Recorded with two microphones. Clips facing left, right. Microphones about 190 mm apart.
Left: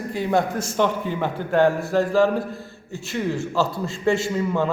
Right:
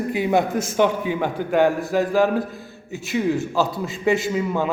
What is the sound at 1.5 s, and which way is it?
Speech, 15° right (ahead or behind).